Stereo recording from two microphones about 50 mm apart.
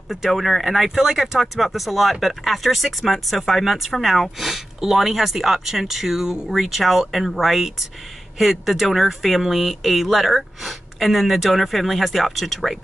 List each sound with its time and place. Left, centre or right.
0.1 s speech: centre